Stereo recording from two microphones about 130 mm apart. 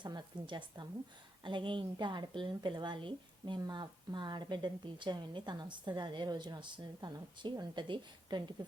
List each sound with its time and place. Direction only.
0.0 s a woman's voice: 35° right (ahead or behind)